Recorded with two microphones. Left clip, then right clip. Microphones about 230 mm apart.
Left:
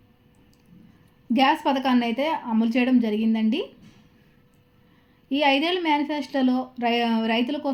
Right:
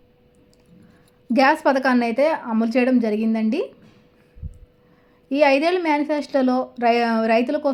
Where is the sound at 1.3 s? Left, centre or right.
Centre.